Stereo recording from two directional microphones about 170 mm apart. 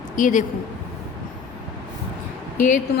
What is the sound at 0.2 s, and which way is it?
Speech, 50° left (ahead or behind).